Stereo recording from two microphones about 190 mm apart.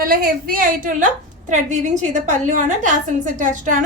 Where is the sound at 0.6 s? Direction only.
45° right (ahead or behind).